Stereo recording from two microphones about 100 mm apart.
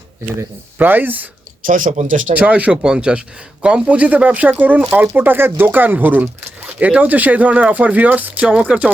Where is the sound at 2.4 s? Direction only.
15° right (ahead or behind).